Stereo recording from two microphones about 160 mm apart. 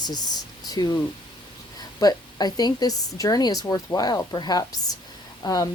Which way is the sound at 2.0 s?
25° left (ahead or behind).